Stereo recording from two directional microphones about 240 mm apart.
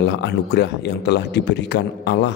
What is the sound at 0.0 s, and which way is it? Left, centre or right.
A man's voice, left.